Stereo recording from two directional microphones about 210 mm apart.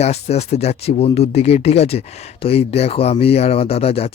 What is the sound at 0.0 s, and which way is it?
Speech, 30° left (ahead or behind).